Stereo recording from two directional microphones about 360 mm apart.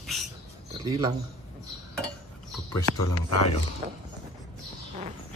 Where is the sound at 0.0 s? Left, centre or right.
Centre.